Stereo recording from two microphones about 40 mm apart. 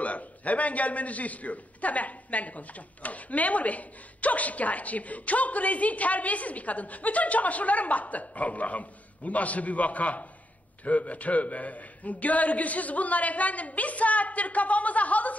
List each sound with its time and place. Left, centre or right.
0.0 s a man's voice: left